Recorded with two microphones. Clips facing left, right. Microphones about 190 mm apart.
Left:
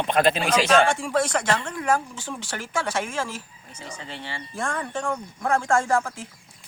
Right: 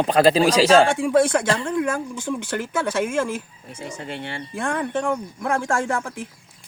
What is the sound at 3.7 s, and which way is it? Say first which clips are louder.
Speech: right 6 dB; 50° right (ahead or behind).